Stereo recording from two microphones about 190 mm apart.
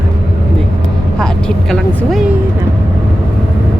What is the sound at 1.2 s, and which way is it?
Speech, 5° left (ahead or behind).